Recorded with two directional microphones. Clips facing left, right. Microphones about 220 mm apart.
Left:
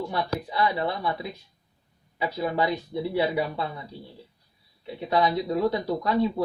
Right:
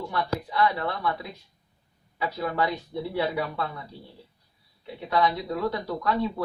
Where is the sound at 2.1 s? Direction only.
20° left (ahead or behind).